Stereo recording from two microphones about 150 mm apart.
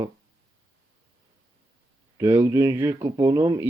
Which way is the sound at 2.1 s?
15° right (ahead or behind).